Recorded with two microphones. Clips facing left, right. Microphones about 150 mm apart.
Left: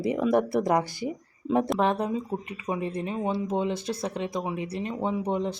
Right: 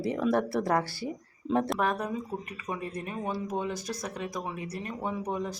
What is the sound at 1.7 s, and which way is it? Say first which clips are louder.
Speech: left 4 dB; 25° left (ahead or behind).